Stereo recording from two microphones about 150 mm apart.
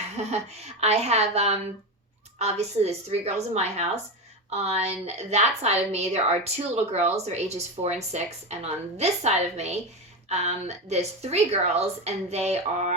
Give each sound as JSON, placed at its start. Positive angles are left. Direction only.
{"t": 0.3, "sound": "speech", "side_deg": -45}